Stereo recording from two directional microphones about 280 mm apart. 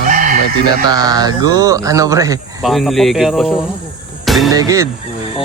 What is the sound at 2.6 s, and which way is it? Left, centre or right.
Speech, centre.